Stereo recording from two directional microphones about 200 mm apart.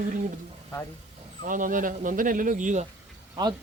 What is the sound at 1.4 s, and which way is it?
A man's voice, 40° right (ahead or behind).